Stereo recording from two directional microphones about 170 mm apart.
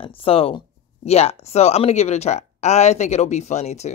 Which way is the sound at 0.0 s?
35° left (ahead or behind).